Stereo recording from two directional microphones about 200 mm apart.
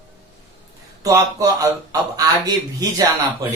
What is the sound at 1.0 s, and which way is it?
A man's voice, 15° right (ahead or behind).